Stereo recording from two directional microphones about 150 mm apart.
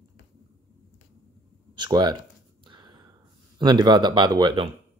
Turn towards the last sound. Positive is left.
turn(degrees=-30)  # may be behind; listen again after turning